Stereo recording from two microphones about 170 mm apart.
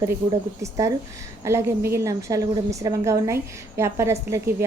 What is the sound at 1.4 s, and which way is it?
A woman's voice, 15° right (ahead or behind).